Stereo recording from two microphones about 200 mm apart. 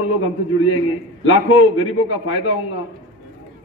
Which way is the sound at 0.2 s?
90° left.